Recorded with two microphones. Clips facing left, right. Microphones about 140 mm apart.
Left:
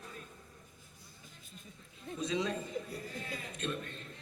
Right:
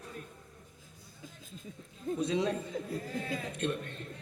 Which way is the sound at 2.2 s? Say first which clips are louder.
Right 3 dB; 60° right (ahead or behind).